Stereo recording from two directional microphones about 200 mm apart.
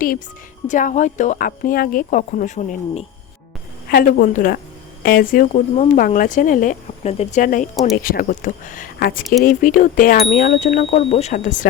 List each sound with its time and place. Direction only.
0.7 s speech: 40° left (ahead or behind)
3.8 s speech: 50° left (ahead or behind)